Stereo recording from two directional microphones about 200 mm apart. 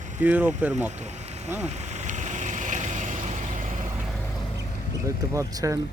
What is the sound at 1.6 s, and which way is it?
Vehicle, 35° right (ahead or behind).